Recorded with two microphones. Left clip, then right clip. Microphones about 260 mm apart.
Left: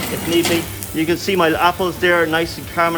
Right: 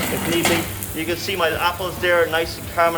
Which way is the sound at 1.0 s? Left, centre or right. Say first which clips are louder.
Left 5 dB; left.